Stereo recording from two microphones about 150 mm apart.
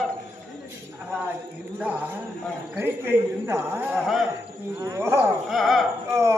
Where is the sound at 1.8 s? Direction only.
10° right (ahead or behind).